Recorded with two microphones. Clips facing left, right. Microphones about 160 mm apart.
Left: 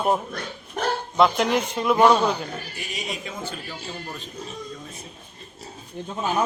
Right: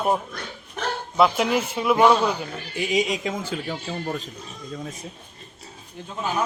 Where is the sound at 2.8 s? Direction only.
90° right.